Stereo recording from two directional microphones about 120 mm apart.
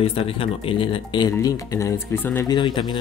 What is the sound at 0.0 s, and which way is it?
Speech, 50° left (ahead or behind).